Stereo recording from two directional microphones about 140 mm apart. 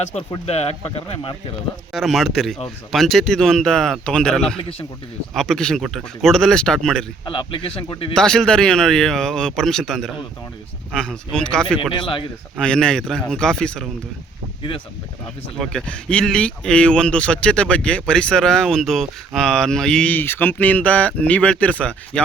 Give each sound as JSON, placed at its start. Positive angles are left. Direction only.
{"t": 0.0, "sound": "speech", "side_deg": 55}
{"t": 1.9, "sound": "speech", "side_deg": 0}
{"t": 7.3, "sound": "speech", "side_deg": 40}
{"t": 8.1, "sound": "speech", "side_deg": 5}
{"t": 11.9, "sound": "speech", "side_deg": 35}
{"t": 12.5, "sound": "speech", "side_deg": 5}
{"t": 15.5, "sound": "speech", "side_deg": 5}